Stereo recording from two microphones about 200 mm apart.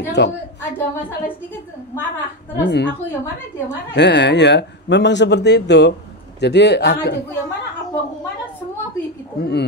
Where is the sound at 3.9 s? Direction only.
60° left (ahead or behind).